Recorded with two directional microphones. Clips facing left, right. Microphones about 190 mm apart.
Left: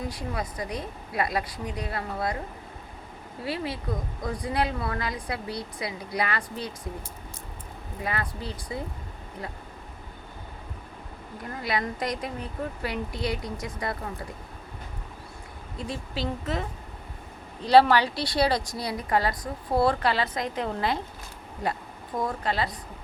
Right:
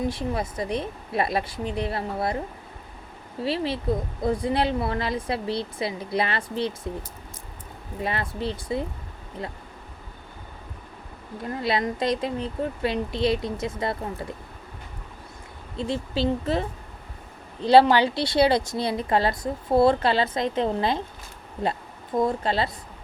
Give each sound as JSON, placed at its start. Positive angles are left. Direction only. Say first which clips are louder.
{"t": 0.1, "sound": "a woman's voice", "louder": "right 5 dB", "side_deg": -25}
{"t": 3.4, "sound": "a woman's voice", "louder": "right 6 dB", "side_deg": -30}
{"t": 8.0, "sound": "a woman's voice", "louder": "right 4 dB", "side_deg": -25}
{"t": 11.6, "sound": "a woman's voice", "louder": "right 4 dB", "side_deg": -25}
{"t": 15.8, "sound": "a woman's voice", "louder": "right 7 dB", "side_deg": -25}
{"t": 17.7, "sound": "a woman's voice", "louder": "right 2 dB", "side_deg": -25}
{"t": 22.2, "sound": "a woman's voice", "louder": "right 4 dB", "side_deg": -25}